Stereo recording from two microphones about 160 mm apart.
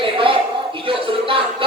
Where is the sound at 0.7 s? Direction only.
35° right (ahead or behind).